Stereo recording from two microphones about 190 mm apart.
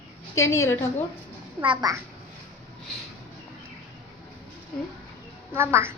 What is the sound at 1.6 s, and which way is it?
Speech, 25° right (ahead or behind).